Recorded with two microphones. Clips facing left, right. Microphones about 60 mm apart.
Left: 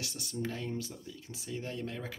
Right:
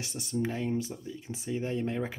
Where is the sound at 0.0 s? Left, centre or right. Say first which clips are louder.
Right 5 dB; right.